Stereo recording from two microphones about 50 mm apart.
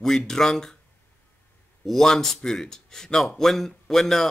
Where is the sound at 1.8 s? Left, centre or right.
Centre.